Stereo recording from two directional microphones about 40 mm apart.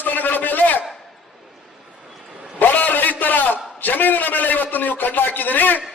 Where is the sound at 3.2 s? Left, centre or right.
Left.